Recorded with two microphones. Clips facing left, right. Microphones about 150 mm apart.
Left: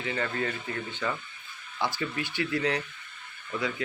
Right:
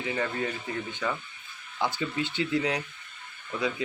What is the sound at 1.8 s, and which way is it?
Speech, 20° right (ahead or behind).